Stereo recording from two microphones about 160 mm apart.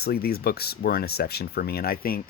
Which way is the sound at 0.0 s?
75° left (ahead or behind).